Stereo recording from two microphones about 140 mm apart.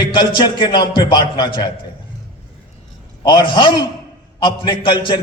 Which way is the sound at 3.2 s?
35° left (ahead or behind).